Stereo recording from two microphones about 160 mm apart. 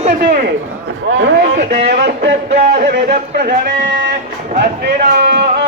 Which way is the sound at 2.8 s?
85° right.